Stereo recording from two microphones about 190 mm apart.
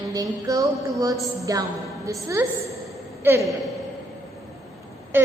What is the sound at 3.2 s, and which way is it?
Speech, 15° right (ahead or behind).